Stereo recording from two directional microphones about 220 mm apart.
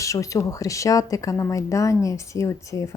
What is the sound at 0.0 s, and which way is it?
Speech, 15° left (ahead or behind).